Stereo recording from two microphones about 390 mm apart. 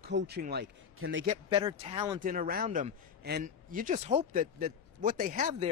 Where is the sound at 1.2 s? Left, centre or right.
Centre.